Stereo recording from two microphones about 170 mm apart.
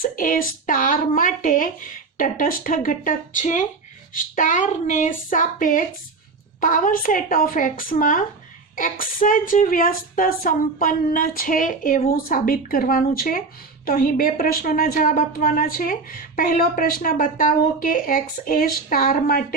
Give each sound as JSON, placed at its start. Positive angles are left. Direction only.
{"t": 0.0, "sound": "a woman's voice", "side_deg": 55}